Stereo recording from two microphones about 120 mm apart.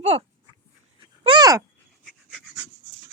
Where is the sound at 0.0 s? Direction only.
60° right (ahead or behind).